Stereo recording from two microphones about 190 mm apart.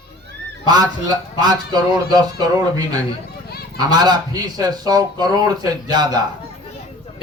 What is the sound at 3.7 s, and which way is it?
Speech, 20° right (ahead or behind).